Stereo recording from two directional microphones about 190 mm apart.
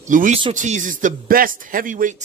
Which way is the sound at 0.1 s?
45° right (ahead or behind).